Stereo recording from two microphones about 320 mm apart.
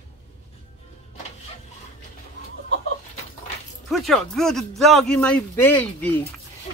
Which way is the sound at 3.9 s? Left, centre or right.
Centre.